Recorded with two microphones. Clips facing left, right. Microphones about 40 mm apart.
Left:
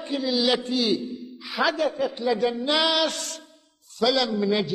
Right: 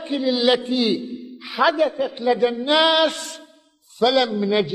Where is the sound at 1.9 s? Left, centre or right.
Centre.